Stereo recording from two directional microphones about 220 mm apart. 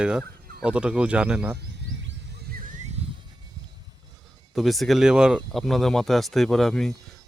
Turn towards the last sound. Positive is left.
turn(degrees=0)  # may be behind; listen again after turning